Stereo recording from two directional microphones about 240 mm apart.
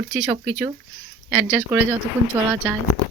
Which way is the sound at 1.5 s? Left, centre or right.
Centre.